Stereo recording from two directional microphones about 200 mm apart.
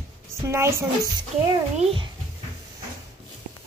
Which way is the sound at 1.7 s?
25° right (ahead or behind).